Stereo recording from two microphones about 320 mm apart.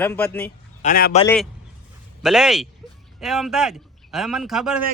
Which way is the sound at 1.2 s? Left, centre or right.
Centre.